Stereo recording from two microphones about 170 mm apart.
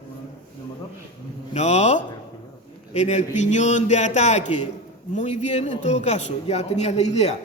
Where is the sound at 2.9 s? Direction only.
40° left (ahead or behind).